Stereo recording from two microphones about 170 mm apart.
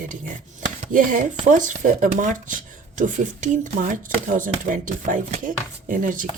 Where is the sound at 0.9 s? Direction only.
50° right (ahead or behind).